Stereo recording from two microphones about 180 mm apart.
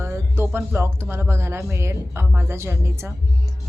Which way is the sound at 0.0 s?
15° right (ahead or behind).